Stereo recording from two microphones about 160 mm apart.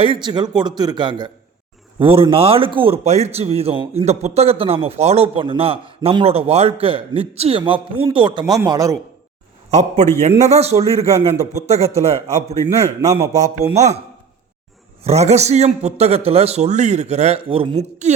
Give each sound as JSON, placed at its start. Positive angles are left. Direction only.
{"t": 0.0, "sound": "a man's voice", "side_deg": -30}
{"t": 9.7, "sound": "a man's voice", "side_deg": -45}
{"t": 15.0, "sound": "a man's voice", "side_deg": -45}
{"t": 18.0, "sound": "a man's voice", "side_deg": -45}